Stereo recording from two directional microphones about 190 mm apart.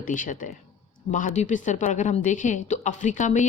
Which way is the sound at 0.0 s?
45° left (ahead or behind).